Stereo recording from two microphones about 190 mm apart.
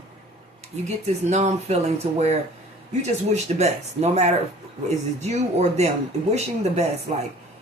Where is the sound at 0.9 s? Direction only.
35° right (ahead or behind).